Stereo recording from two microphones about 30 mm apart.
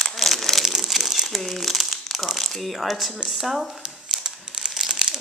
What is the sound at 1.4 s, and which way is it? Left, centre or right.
Crumpling, centre.